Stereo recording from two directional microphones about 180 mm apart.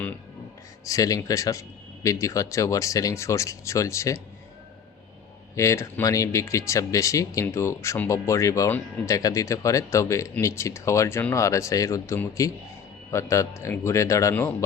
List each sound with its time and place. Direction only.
0.9 s speech: 20° left (ahead or behind)
5.5 s speech: 15° left (ahead or behind)